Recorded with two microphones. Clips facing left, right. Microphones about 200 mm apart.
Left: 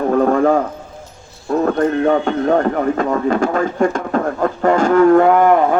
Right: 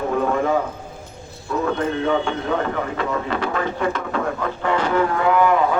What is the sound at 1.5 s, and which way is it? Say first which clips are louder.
A man's voice: left 6 dB; 50° left (ahead or behind).